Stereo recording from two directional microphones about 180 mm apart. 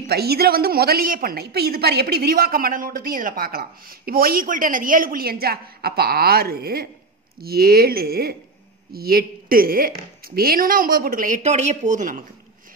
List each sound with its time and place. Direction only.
0.0 s a woman's voice: 60° right (ahead or behind); by 12.2 s 45° right (ahead or behind)